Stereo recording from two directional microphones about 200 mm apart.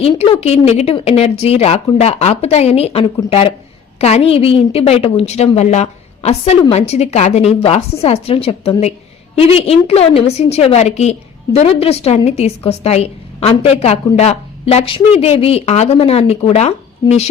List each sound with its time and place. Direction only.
0.0 s a woman's voice: 30° left (ahead or behind)